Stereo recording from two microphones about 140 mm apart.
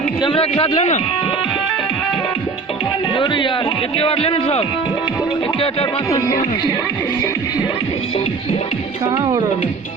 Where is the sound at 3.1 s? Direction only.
35° left (ahead or behind).